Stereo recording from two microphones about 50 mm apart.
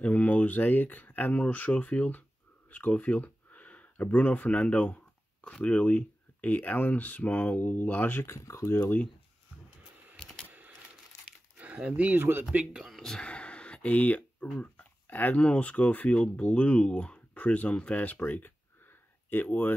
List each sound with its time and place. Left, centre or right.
0.0 s speech: left
5.4 s speech: centre
5.7 s speech: left
8.4 s speech: left
10.1 s a sound: centre
11.5 s a sound: right
12.2 s speech: right
12.7 s speech: centre
13.2 s a sound: left
15.4 s speech: left